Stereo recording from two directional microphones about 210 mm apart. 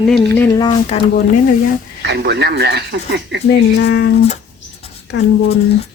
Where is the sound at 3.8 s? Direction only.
50° left (ahead or behind).